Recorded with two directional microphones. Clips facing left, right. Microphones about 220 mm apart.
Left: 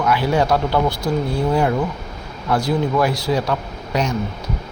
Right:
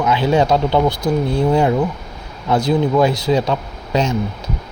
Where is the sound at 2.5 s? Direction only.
20° right (ahead or behind).